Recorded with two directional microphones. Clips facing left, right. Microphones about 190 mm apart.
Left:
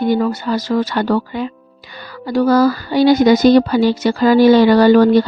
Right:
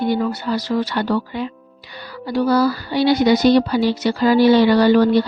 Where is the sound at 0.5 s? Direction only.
45° left (ahead or behind).